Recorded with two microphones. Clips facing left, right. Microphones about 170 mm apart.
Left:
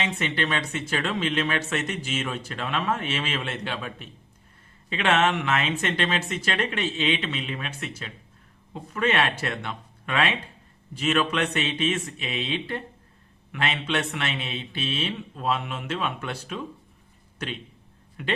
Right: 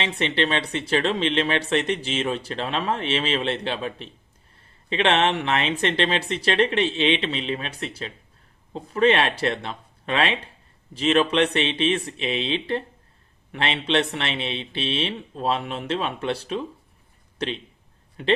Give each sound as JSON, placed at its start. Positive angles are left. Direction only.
{"t": 0.0, "sound": "speech", "side_deg": -30}
{"t": 18.2, "sound": "a man's voice", "side_deg": -30}